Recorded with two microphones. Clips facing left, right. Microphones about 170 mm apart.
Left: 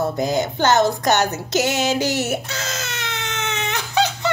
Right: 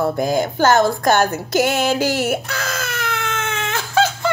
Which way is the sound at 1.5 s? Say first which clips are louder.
Right 3 dB; 55° right (ahead or behind).